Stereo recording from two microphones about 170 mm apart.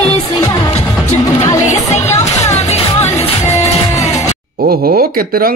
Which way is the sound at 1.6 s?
40° left (ahead or behind).